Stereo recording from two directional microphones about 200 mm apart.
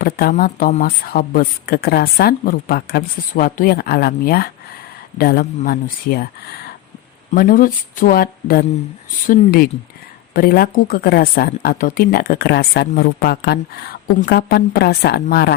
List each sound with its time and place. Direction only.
0.0 s speech: 45° left (ahead or behind)